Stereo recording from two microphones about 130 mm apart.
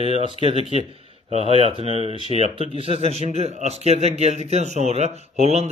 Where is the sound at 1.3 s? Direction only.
45° left (ahead or behind).